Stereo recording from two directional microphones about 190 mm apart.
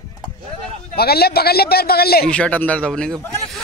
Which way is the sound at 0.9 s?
55° left (ahead or behind).